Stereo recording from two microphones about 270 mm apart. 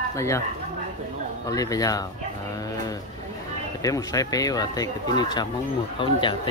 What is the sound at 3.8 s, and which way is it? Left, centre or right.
Speech, centre.